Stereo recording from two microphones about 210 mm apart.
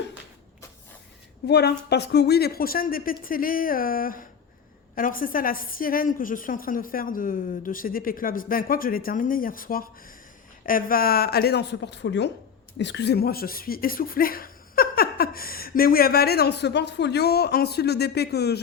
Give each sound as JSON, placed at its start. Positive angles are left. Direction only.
{"t": 1.5, "sound": "a woman's voice", "side_deg": 50}